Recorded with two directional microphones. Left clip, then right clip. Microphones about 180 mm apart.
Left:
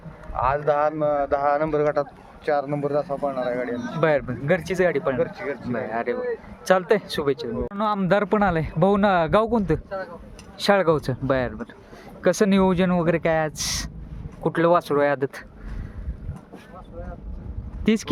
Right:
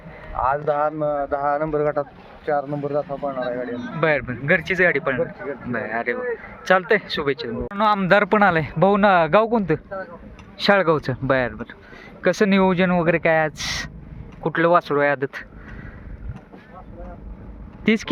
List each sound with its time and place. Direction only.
0.3 s speech: 30° left (ahead or behind)
2.6 s a man's voice: 15° left (ahead or behind)
3.7 s a man's voice: 45° left (ahead or behind)
3.9 s a man's voice: 15° left (ahead or behind)
5.3 s speech: 35° left (ahead or behind)
5.6 s a man's voice: 15° left (ahead or behind)
17.8 s a man's voice: 15° left (ahead or behind)